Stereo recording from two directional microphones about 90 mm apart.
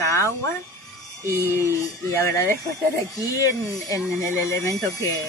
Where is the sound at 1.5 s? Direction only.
35° left (ahead or behind).